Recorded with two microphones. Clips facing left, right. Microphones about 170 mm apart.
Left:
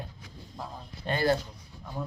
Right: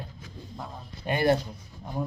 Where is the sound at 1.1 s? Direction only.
20° right (ahead or behind).